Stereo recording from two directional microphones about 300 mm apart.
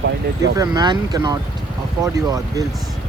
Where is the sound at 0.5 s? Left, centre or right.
Centre.